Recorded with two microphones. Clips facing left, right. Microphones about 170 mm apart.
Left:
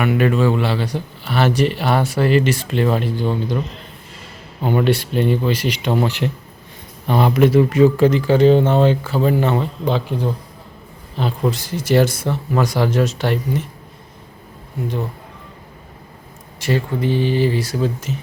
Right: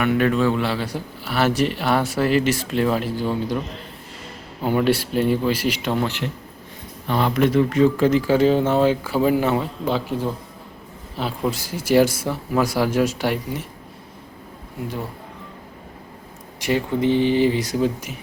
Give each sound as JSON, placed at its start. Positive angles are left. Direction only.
{"t": 0.0, "sound": "a man's voice", "side_deg": 5}
{"t": 4.6, "sound": "a man's voice", "side_deg": -5}
{"t": 6.0, "sound": "a man's voice", "side_deg": 15}
{"t": 16.6, "sound": "speech", "side_deg": -15}